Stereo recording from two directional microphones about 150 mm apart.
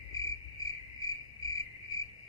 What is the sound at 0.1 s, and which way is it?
Cricket, 20° left (ahead or behind).